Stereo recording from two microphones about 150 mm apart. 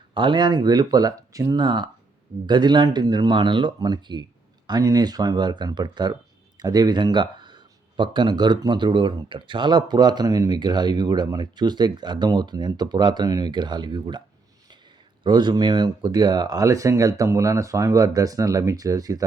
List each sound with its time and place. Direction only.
0.1 s speech: 30° right (ahead or behind)
15.2 s speech: 30° right (ahead or behind)